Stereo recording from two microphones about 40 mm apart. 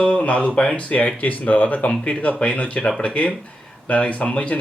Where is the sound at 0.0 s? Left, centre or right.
Left.